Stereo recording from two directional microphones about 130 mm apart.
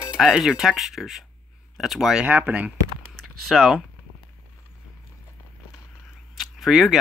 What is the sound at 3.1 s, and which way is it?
Typing, centre (ahead or behind).